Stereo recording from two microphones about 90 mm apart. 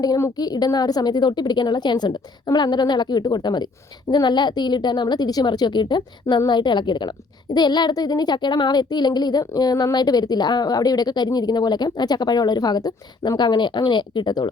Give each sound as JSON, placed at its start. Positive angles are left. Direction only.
{"t": 0.3, "sound": "a woman's voice", "side_deg": 45}